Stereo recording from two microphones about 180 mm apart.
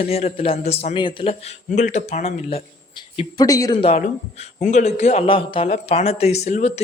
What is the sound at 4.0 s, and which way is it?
A man's voice, 40° left (ahead or behind).